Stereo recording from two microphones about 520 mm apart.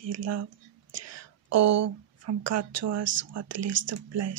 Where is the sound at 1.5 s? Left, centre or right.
Right.